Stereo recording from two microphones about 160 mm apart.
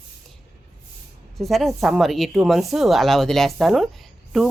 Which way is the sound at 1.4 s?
Centre (ahead or behind).